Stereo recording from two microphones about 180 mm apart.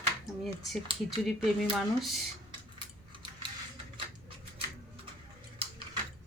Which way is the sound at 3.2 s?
25° right (ahead or behind).